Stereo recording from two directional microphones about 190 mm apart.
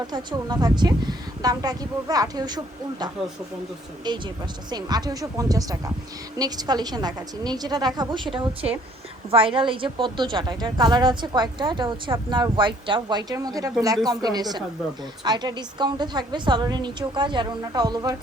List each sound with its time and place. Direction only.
0.1 s a woman's voice: 20° right (ahead or behind)
4.7 s a woman's voice: 20° right (ahead or behind)